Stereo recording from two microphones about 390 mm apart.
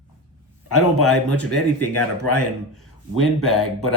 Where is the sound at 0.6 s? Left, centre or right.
Left.